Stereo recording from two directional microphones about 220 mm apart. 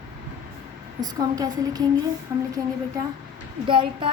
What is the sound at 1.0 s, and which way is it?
Speech, 15° right (ahead or behind).